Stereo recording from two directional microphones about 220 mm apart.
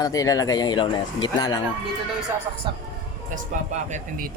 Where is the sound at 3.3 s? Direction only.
35° right (ahead or behind).